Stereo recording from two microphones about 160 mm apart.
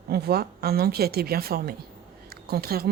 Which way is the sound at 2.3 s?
75° right (ahead or behind).